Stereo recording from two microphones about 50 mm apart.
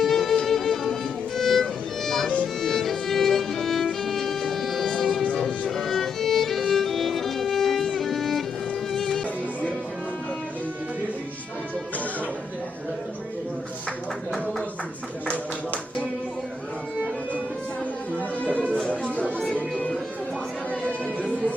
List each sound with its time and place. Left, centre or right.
0.0 s music: centre
1.4 s violin: centre
2.0 s music: centre
5.2 s music: left
5.7 s music: centre
18.7 s music: left